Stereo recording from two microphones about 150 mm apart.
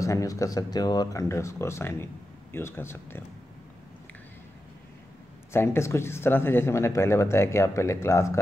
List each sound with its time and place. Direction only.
0.0 s speech: 20° left (ahead or behind)
5.5 s speech: 15° left (ahead or behind)